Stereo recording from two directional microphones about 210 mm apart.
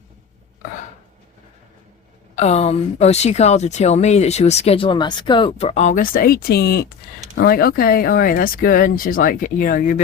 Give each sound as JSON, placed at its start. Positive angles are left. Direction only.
{"t": 2.3, "sound": "speech", "side_deg": 30}